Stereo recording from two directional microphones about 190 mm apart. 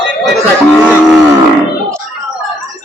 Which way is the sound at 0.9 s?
5° right (ahead or behind).